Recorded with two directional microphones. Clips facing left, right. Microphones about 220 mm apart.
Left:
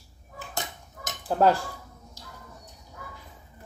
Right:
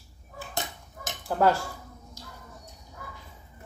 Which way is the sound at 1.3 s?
20° left (ahead or behind).